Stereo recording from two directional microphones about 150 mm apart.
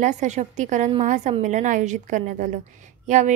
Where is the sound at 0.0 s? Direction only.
50° right (ahead or behind).